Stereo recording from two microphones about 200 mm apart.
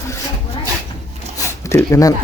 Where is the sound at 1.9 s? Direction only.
15° left (ahead or behind).